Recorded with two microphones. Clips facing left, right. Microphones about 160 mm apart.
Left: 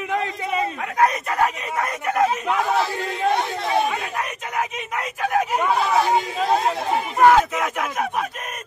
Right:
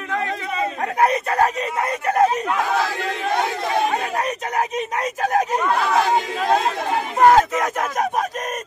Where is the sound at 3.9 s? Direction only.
40° right (ahead or behind).